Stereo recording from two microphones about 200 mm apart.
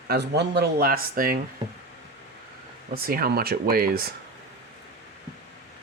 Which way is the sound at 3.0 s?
45° right (ahead or behind).